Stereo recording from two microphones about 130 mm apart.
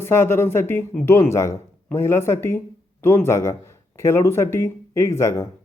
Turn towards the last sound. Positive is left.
turn(degrees=20)  # may be behind; listen again after turning